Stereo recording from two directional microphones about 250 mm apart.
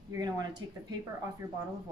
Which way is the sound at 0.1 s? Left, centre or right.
Centre.